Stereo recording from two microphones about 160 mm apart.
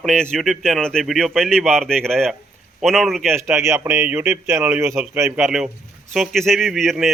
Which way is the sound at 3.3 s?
15° right (ahead or behind).